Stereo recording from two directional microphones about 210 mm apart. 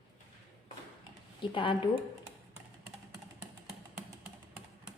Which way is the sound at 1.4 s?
25° left (ahead or behind).